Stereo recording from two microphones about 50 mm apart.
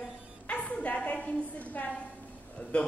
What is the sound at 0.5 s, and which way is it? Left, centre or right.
Music, left.